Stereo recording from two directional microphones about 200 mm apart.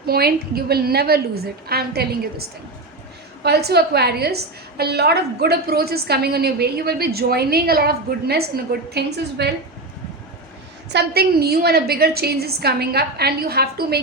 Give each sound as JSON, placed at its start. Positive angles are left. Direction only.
{"t": 0.0, "sound": "a woman's voice", "side_deg": -50}
{"t": 10.8, "sound": "a woman's voice", "side_deg": -55}